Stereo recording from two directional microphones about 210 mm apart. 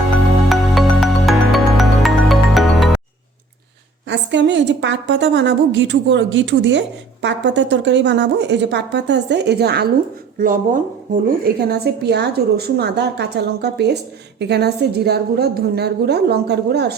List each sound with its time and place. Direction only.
0.4 s music: centre (ahead or behind)
4.1 s a woman's voice: 55° right (ahead or behind)
10.3 s speech: 40° right (ahead or behind)
11.4 s a woman's voice: 50° right (ahead or behind)